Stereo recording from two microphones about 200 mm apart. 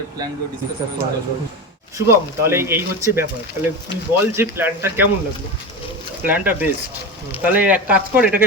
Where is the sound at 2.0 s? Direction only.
15° right (ahead or behind).